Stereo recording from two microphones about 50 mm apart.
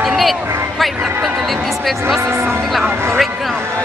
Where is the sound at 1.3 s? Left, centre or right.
Centre.